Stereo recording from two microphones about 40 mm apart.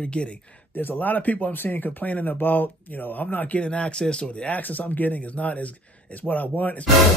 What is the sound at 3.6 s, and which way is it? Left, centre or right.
Speech, left.